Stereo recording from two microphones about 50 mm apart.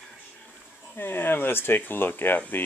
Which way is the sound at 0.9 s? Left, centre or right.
Left.